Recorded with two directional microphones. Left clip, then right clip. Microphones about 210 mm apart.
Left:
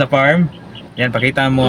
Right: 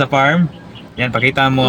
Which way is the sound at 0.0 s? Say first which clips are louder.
Left 1 dB; centre (ahead or behind).